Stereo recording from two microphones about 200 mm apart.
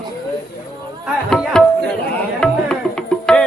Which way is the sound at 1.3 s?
5° left (ahead or behind).